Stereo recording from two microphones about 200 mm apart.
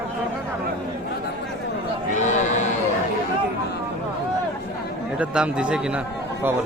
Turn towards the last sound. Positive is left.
turn(degrees=-5)  # may be behind; listen again after turning